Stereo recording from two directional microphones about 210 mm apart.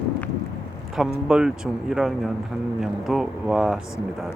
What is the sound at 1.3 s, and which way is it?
Speech, 5° right (ahead or behind).